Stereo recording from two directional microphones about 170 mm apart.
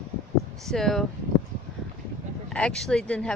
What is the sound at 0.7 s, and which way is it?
Speech, centre (ahead or behind).